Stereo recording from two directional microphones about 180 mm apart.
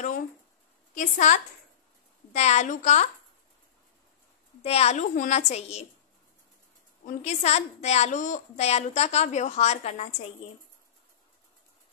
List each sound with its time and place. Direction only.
0.9 s a woman's voice: 45° left (ahead or behind)
4.6 s a woman's voice: 35° left (ahead or behind)
7.1 s a woman's voice: 40° left (ahead or behind)